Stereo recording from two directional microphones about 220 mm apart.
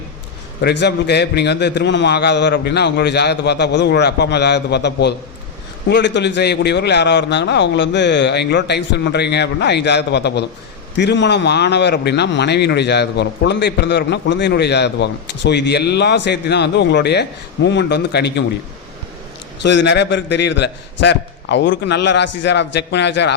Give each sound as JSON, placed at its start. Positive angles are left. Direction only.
{"t": 0.6, "sound": "speech", "side_deg": 50}
{"t": 19.6, "sound": "speech", "side_deg": 55}